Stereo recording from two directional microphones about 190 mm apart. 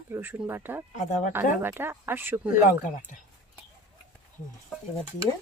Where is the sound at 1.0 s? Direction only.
40° left (ahead or behind).